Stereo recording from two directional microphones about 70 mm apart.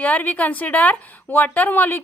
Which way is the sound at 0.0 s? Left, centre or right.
Left.